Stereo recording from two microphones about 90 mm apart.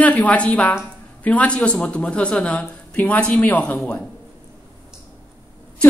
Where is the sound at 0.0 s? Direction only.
15° left (ahead or behind).